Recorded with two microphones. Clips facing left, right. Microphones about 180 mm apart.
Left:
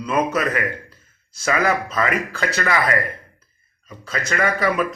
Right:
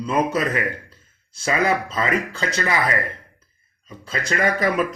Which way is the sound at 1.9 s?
25° right (ahead or behind).